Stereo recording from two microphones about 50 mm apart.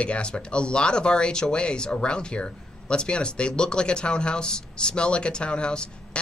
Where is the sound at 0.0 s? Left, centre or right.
Left.